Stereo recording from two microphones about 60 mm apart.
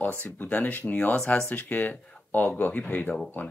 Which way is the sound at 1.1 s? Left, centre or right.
Centre.